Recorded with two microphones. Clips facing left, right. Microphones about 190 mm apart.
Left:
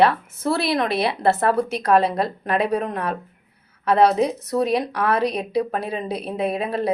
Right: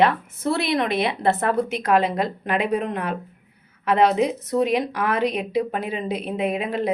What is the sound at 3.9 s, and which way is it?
A woman's voice, 40° left (ahead or behind).